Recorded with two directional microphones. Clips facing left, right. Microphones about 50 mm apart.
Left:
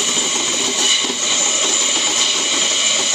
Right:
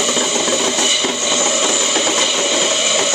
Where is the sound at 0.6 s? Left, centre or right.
Right.